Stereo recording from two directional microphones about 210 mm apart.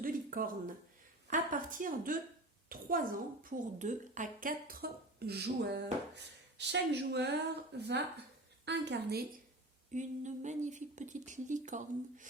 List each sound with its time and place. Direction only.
0.0 s a sound: 40° right (ahead or behind)
1.3 s a woman's voice: 40° right (ahead or behind)
9.9 s speech: 35° right (ahead or behind)